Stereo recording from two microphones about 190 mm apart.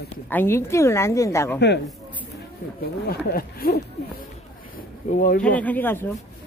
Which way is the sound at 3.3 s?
50° left (ahead or behind).